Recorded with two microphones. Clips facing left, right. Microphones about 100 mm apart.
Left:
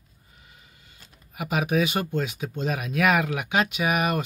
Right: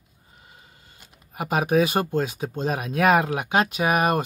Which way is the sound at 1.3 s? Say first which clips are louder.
Right 4 dB; 40° right (ahead or behind).